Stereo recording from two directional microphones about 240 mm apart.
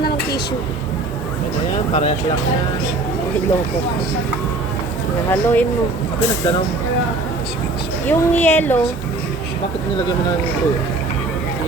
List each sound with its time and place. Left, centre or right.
1.9 s speech: left
5.3 s a woman's voice: centre
8.0 s a woman's voice: centre